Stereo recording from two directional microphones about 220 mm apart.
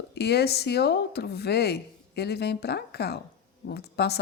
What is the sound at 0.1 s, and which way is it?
Speech, 50° left (ahead or behind).